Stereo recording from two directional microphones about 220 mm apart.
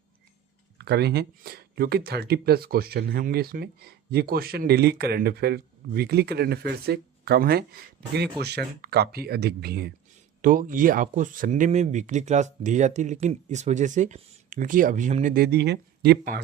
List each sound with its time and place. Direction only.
0.8 s speech: 50° right (ahead or behind)